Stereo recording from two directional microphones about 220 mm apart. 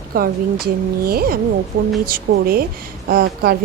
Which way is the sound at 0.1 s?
40° right (ahead or behind).